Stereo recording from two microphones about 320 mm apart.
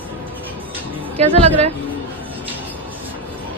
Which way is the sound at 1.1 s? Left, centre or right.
Centre.